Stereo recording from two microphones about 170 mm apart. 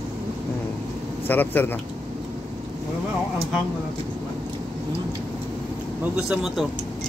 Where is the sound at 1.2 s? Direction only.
10° left (ahead or behind).